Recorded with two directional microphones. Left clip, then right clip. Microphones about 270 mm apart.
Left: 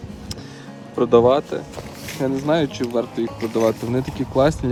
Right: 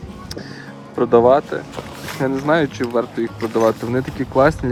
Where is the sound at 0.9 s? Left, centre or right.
Centre.